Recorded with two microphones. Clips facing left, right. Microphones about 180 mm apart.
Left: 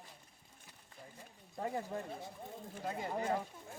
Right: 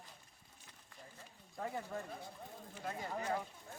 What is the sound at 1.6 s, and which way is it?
Speech, 20° left (ahead or behind).